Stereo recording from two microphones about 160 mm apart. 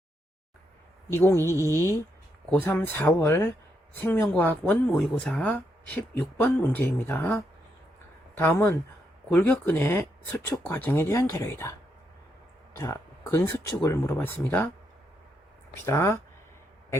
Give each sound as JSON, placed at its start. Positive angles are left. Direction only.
{"t": 1.1, "sound": "speech", "side_deg": 15}
{"t": 12.7, "sound": "speech", "side_deg": 20}
{"t": 15.8, "sound": "speech", "side_deg": 15}